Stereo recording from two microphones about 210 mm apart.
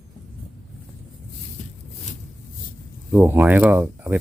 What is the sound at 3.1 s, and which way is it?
Speech, 10° right (ahead or behind).